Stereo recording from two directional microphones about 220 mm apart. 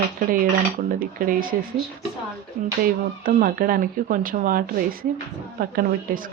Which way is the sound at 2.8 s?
40° right (ahead or behind).